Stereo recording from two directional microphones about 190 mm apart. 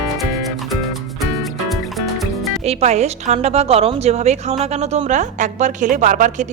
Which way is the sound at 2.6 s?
35° right (ahead or behind).